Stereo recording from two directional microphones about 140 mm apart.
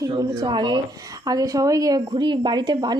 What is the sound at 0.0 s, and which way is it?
Speech, 30° right (ahead or behind).